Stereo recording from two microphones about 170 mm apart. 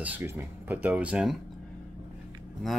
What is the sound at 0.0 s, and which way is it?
Speech, 10° right (ahead or behind).